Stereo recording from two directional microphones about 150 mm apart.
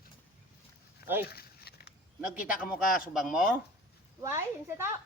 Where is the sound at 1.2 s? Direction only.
90° left.